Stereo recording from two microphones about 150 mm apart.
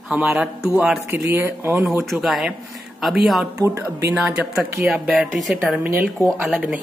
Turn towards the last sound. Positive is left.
turn(degrees=-5)  # may be behind; listen again after turning